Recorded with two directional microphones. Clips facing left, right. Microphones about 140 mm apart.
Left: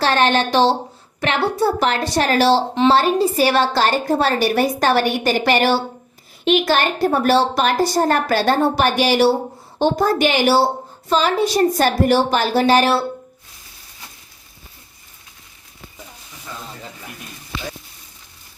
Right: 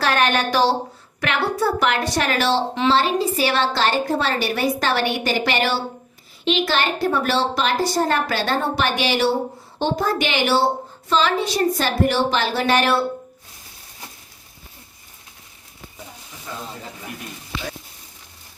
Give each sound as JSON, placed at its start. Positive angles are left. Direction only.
{"t": 0.0, "sound": "a woman's voice", "side_deg": 30}